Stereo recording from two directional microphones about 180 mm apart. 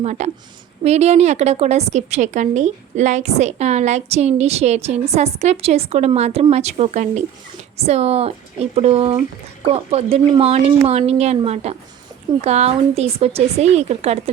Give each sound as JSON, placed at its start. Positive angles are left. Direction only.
{"t": 0.0, "sound": "a woman's voice", "side_deg": -40}